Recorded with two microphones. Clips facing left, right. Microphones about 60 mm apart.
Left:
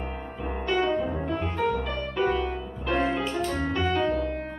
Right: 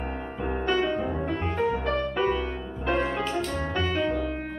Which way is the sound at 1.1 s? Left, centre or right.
Centre.